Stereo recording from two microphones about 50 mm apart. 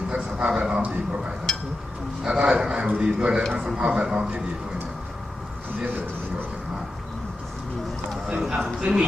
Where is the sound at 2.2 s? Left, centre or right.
Centre.